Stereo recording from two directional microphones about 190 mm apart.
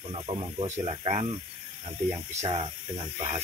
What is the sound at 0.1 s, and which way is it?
Speech, 30° right (ahead or behind).